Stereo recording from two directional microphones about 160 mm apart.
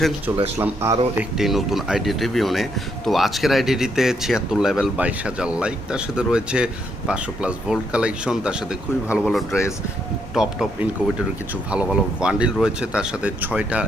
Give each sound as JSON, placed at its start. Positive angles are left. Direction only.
{"t": 0.3, "sound": "speech", "side_deg": -15}
{"t": 1.4, "sound": "speech", "side_deg": 0}